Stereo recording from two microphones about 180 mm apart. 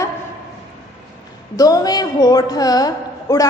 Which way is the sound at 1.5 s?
20° left (ahead or behind).